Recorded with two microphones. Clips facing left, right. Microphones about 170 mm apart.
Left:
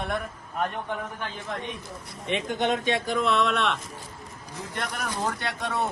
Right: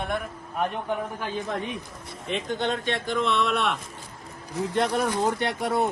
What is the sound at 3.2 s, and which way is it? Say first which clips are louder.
Speech: right 1 dB; centre (ahead or behind).